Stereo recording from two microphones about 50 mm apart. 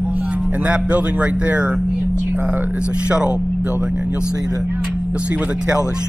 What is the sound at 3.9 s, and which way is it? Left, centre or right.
Speech, right.